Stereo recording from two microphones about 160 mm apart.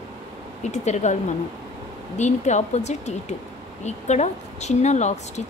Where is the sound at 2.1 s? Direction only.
45° left (ahead or behind).